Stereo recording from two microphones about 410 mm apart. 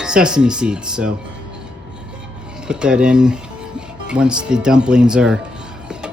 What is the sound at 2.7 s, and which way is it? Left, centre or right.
Speech, centre.